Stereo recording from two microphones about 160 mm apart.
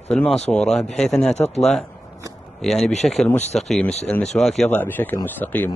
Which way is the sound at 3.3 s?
45° left (ahead or behind).